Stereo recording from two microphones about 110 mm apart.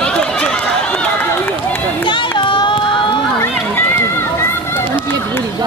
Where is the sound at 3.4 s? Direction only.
25° left (ahead or behind).